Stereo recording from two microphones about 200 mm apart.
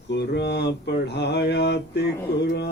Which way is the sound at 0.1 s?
60° left (ahead or behind).